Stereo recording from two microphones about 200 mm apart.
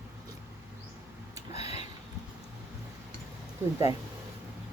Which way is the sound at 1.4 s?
30° left (ahead or behind).